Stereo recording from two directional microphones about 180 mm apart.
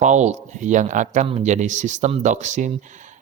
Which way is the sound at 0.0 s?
40° right (ahead or behind).